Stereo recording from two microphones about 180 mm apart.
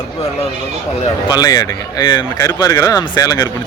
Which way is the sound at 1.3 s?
20° left (ahead or behind).